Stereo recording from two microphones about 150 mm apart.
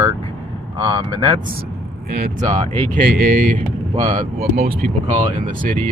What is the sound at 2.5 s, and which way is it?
Speech, 50° right (ahead or behind).